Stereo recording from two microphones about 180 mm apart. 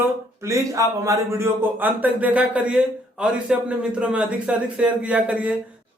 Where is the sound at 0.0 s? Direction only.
15° right (ahead or behind).